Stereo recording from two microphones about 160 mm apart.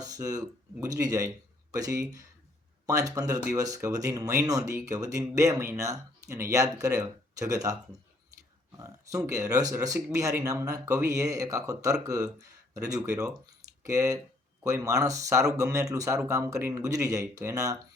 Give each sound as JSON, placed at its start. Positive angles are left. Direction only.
{"t": 0.0, "sound": "speech", "side_deg": -20}
{"t": 8.8, "sound": "speech", "side_deg": -20}